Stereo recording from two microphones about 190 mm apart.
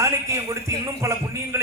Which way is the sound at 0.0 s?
15° right (ahead or behind).